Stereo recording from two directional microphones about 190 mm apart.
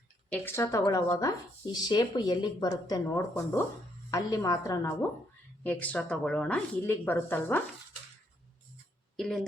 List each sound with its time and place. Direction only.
0.3 s speech: 10° left (ahead or behind)
9.1 s a woman's voice: 5° left (ahead or behind)